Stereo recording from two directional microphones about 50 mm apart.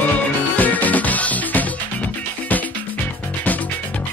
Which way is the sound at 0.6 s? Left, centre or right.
Left.